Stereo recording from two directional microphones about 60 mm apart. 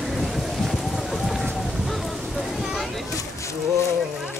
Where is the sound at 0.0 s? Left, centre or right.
Centre.